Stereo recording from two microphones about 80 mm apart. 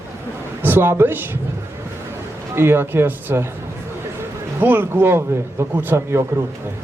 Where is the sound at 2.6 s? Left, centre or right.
Right.